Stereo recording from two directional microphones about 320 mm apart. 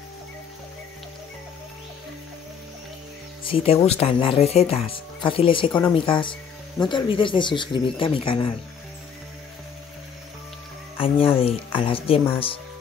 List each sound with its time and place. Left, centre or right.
3.4 s speech: centre
11.0 s speech: centre